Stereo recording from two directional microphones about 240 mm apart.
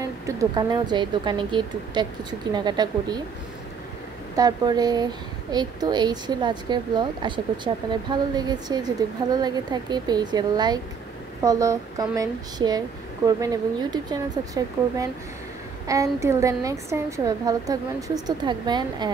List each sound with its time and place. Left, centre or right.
0.0 s speech: centre
4.4 s speech: centre
15.9 s speech: centre